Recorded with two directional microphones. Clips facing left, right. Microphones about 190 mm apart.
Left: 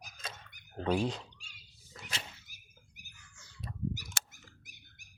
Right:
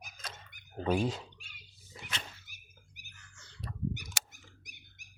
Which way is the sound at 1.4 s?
55° right (ahead or behind).